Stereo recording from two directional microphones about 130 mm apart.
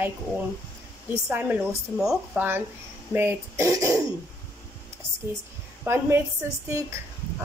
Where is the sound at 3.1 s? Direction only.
20° right (ahead or behind).